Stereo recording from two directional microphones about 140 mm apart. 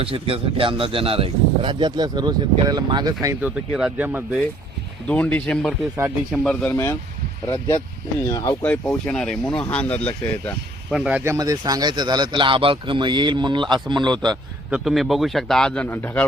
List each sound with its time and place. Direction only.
0.0 s speech: 40° right (ahead or behind)
3.7 s speech: 5° right (ahead or behind)
5.0 s speech: 10° left (ahead or behind)
8.3 s speech: 25° left (ahead or behind)
10.9 s speech: 5° right (ahead or behind)
11.2 s speech: 20° right (ahead or behind)
14.7 s a man's voice: centre (ahead or behind)